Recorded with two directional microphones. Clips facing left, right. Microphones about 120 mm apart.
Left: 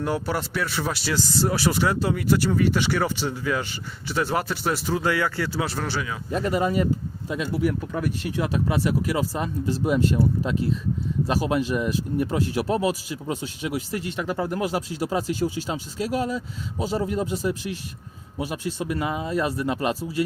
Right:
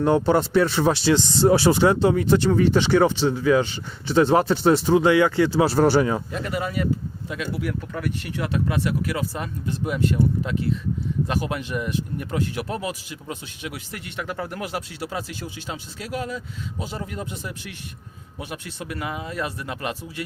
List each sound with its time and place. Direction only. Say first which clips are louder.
0.0 s speech: right 7 dB; 25° right (ahead or behind); by 6.2 s 40° right (ahead or behind)
6.3 s speech: left 4 dB; 35° left (ahead or behind)
7.6 s speech: left 3 dB; 15° left (ahead or behind)
9.3 s speech: left 3 dB; 35° left (ahead or behind)
11.3 s speech: left 3 dB; 30° left (ahead or behind)